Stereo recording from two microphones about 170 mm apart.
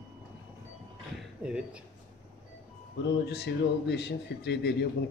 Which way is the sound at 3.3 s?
80° left.